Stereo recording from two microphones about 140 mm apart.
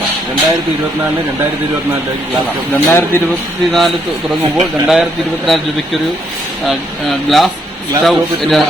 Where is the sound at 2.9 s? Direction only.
15° left (ahead or behind).